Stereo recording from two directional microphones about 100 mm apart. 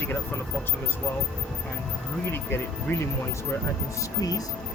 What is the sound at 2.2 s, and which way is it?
Speech, 25° left (ahead or behind).